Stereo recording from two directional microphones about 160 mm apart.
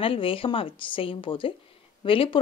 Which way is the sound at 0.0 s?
35° left (ahead or behind).